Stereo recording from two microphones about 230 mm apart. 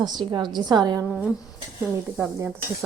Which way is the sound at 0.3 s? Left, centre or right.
Centre.